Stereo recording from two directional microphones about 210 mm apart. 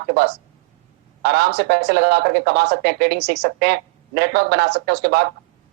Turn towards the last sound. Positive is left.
turn(degrees=-50)  # may be behind; listen again after turning